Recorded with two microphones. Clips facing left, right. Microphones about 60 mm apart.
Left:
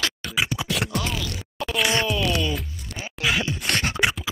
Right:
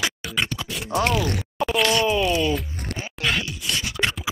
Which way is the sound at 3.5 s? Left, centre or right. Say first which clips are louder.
Left 3 dB; left.